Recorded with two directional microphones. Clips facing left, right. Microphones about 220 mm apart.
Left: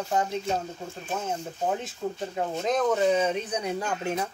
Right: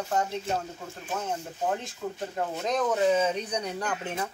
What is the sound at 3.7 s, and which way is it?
Speech, 25° left (ahead or behind).